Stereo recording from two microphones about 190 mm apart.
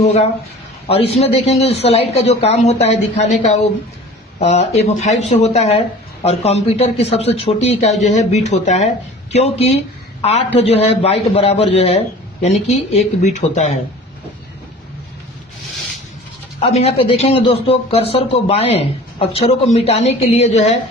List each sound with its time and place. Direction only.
0.0 s a man's voice: 35° left (ahead or behind)
16.6 s a man's voice: 30° left (ahead or behind)